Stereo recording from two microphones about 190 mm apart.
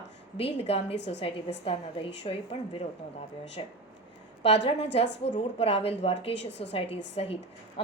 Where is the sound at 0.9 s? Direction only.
65° left (ahead or behind).